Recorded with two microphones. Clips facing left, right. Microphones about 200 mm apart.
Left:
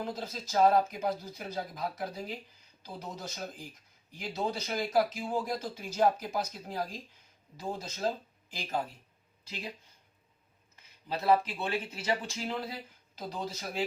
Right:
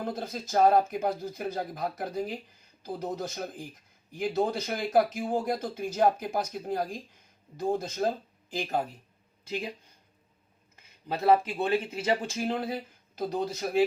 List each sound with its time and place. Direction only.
0.0 s speech: 55° right (ahead or behind)
9.4 s speech: 55° right (ahead or behind)
11.1 s speech: 50° right (ahead or behind)